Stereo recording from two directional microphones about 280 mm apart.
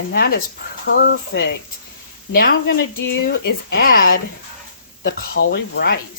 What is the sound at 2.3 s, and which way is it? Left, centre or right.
Speech, left.